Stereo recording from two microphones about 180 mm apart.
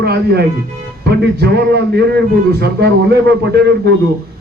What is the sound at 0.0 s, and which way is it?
Speech, 65° right (ahead or behind).